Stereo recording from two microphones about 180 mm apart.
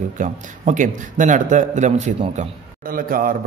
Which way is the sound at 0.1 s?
45° right (ahead or behind).